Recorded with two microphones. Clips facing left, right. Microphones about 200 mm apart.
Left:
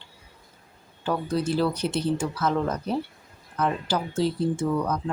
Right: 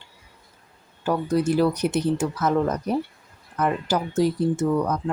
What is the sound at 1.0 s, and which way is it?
Speech, 15° right (ahead or behind).